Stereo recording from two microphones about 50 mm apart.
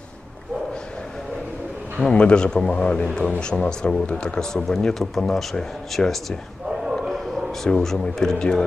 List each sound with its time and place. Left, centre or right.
2.1 s speech: centre
6.7 s a sound: centre
7.6 s speech: centre